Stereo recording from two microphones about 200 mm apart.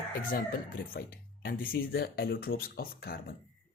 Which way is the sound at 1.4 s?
50° left (ahead or behind).